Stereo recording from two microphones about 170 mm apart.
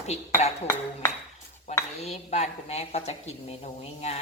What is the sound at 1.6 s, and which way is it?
Speech, 40° left (ahead or behind).